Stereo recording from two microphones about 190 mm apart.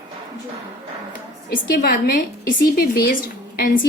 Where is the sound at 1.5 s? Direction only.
50° left (ahead or behind).